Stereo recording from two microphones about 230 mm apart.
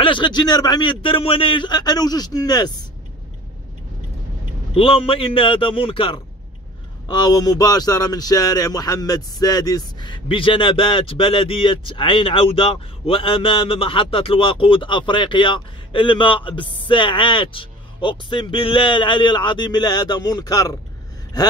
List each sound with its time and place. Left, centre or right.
0.0 s speech: left
4.7 s speech: left